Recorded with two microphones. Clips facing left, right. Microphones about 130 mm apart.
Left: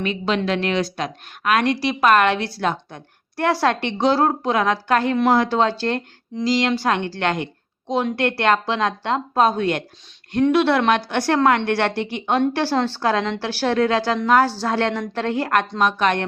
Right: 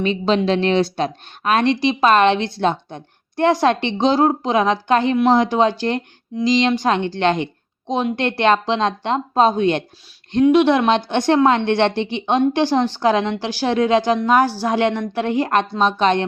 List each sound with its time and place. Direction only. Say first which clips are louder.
0.0 s a woman's voice: right 4 dB; 25° right (ahead or behind)